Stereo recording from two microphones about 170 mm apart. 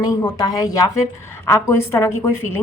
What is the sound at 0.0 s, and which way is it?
A woman's voice, 20° left (ahead or behind).